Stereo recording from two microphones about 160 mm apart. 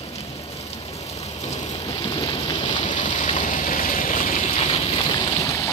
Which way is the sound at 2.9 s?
50° left (ahead or behind).